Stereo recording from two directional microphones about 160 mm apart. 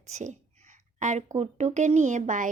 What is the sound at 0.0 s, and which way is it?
A woman's voice, 45° right (ahead or behind).